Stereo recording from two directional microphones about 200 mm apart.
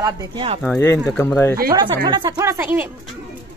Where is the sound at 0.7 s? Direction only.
10° left (ahead or behind).